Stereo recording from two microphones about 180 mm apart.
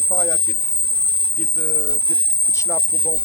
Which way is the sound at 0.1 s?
Centre (ahead or behind).